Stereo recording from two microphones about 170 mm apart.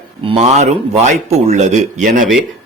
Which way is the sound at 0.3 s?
40° right (ahead or behind).